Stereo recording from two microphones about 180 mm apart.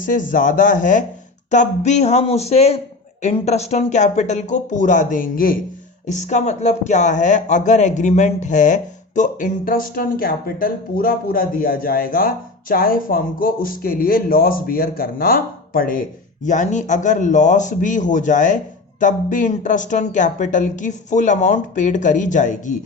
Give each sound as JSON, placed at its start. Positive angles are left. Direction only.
{"t": 0.0, "sound": "speech", "side_deg": 50}
{"t": 6.1, "sound": "speech", "side_deg": 40}